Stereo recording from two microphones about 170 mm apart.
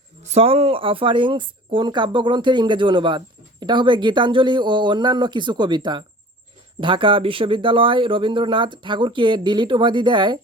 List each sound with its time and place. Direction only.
0.2 s speech: 40° right (ahead or behind)